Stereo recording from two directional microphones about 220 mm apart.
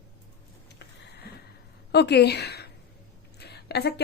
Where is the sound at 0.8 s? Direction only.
50° left (ahead or behind).